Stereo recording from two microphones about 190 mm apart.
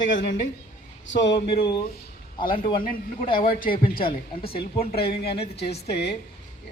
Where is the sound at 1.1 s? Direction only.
70° left (ahead or behind).